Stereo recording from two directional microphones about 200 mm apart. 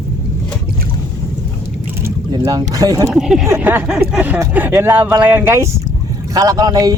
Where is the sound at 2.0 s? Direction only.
20° right (ahead or behind).